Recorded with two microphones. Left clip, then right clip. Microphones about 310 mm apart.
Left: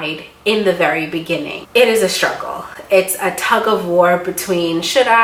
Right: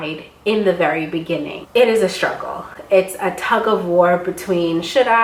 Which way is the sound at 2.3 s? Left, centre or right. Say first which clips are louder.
Left 2 dB; centre.